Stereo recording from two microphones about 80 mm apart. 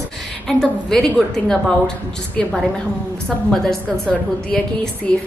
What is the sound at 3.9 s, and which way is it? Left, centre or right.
A woman's voice, centre.